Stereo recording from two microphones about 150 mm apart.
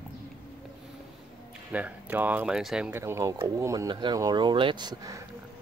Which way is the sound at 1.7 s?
10° right (ahead or behind).